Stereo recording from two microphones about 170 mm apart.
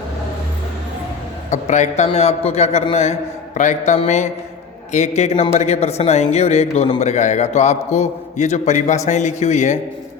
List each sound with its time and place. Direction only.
1.5 s a man's voice: 45° left (ahead or behind)